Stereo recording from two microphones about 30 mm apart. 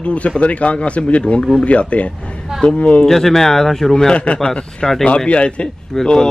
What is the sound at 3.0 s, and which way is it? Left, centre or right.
Speech, centre.